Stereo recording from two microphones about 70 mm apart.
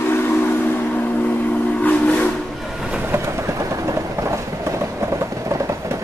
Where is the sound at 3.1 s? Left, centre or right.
Right.